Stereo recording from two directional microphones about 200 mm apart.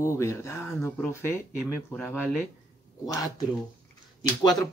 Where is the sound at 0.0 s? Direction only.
15° left (ahead or behind).